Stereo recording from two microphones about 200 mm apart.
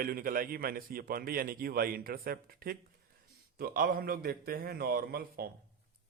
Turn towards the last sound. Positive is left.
turn(degrees=-50)  # may be behind; listen again after turning